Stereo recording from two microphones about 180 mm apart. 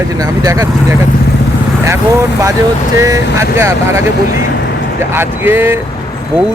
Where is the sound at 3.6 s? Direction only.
15° right (ahead or behind).